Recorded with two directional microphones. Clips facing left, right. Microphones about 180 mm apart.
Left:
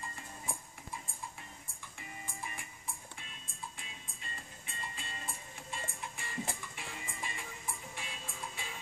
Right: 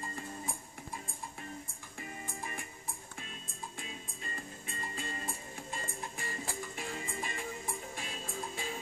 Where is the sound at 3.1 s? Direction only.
45° right (ahead or behind).